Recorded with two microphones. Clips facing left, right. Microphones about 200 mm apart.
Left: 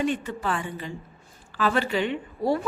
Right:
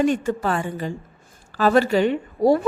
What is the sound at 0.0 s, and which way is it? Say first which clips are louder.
A woman's voice: right 6 dB; 45° right (ahead or behind).